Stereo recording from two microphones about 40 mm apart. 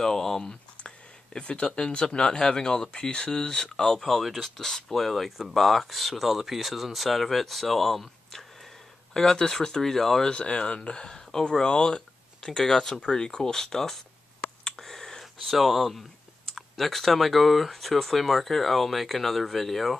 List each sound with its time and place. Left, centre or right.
0.0 s speech: centre
1.4 s speech: left
3.8 s speech: centre
10.3 s speech: left; by 14.0 s centre
14.6 s a sound: centre
15.5 s speech: centre